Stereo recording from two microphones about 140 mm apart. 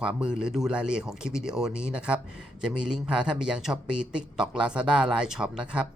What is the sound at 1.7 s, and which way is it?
Speech, 20° left (ahead or behind).